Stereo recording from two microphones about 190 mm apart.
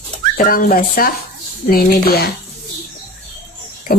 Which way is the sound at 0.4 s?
50° left (ahead or behind).